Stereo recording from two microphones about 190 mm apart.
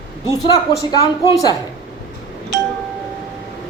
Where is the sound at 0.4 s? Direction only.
20° left (ahead or behind).